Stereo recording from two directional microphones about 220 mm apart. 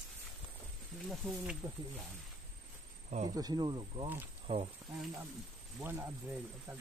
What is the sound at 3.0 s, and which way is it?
Speech, 35° right (ahead or behind).